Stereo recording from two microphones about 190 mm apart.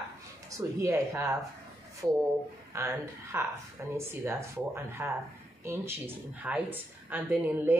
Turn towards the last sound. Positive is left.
turn(degrees=-10)  # may be behind; listen again after turning